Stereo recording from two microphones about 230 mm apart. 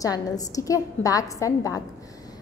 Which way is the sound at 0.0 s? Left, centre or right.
Centre.